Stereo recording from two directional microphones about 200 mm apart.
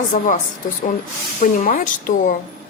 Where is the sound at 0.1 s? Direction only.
40° left (ahead or behind).